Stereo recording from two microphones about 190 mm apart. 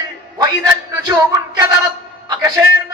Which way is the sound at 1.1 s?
20° right (ahead or behind).